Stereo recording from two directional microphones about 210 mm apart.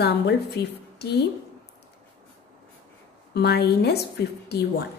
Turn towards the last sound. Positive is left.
turn(degrees=50)  # may be behind; listen again after turning